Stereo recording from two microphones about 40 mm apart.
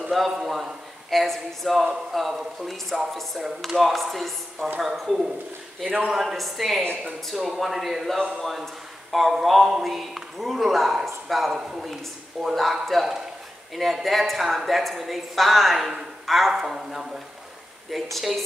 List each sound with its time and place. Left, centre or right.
0.1 s speech: centre
5.0 s a man's voice: centre
6.3 s speech: centre
16.5 s a man's voice: centre